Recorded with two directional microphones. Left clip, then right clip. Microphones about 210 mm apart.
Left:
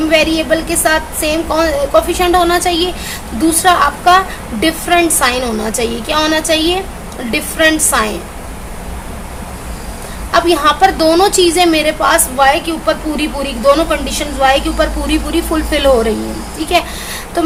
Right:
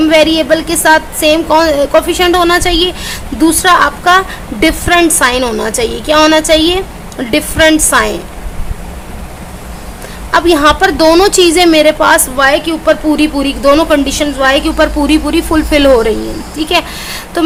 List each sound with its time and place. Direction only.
0.1 s a woman's voice: 40° right (ahead or behind)
10.3 s a woman's voice: 40° right (ahead or behind)